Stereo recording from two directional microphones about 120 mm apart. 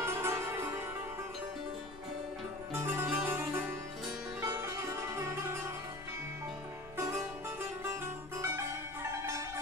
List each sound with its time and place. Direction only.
0.0 s music: 20° right (ahead or behind)
2.7 s music: 20° right (ahead or behind)
7.0 s music: 20° right (ahead or behind)
8.4 s music: 20° right (ahead or behind)